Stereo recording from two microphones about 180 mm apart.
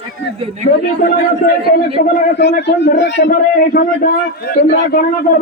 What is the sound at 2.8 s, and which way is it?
A man's voice, 75° left (ahead or behind).